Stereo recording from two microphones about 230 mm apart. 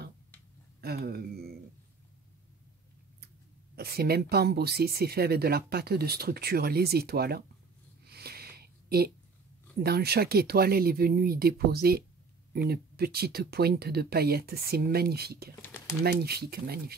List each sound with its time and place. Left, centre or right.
0.7 s speech: right
3.7 s speech: right
8.0 s a sound: right
9.8 s speech: right
15.6 s a sound: centre
16.0 s speech: right